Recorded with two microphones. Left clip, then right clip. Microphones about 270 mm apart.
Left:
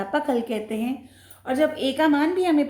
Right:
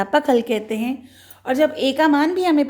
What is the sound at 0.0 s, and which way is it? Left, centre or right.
A woman's voice, right.